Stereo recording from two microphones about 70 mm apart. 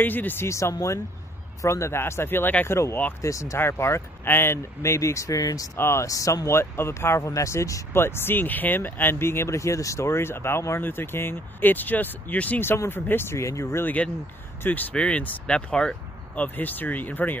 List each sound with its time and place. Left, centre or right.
0.0 s speech: left
0.5 s speech: left
3.2 s speech: left
3.5 s speech: left
5.8 s speech: left
7.9 s speech: left
14.6 s speech: left
16.4 s speech: left